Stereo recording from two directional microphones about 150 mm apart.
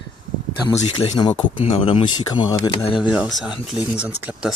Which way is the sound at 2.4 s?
25° left (ahead or behind).